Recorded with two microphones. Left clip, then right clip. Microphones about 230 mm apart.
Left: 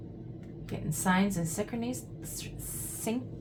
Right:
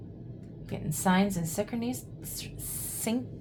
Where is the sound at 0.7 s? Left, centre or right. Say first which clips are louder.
Right 2 dB; right.